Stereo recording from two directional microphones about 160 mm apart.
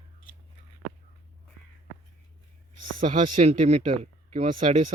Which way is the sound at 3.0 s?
55° right (ahead or behind).